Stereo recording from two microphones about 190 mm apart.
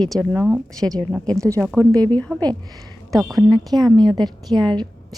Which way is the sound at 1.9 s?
20° right (ahead or behind).